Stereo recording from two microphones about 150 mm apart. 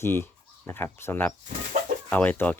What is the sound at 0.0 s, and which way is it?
Speech, 15° left (ahead or behind).